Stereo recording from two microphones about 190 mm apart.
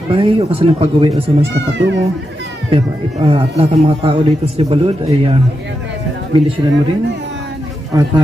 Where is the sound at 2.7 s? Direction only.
30° right (ahead or behind).